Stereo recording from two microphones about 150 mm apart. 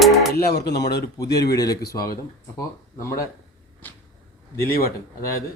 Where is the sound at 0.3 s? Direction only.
90° left.